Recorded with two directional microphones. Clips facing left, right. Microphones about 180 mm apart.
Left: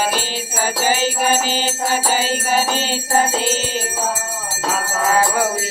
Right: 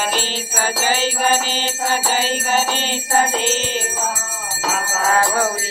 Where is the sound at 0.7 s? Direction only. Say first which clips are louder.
Left 2 dB; 10° left (ahead or behind).